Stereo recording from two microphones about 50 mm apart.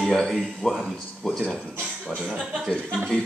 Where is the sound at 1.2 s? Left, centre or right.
Centre.